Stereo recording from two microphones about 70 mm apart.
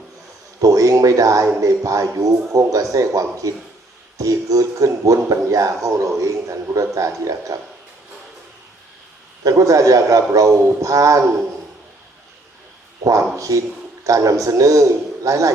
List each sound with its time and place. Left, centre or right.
0.6 s speech: right
9.4 s speech: right
13.1 s a man's voice: right